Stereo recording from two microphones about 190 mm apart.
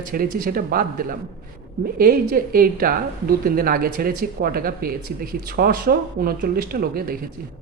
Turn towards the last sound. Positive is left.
turn(degrees=-50)  # may be behind; listen again after turning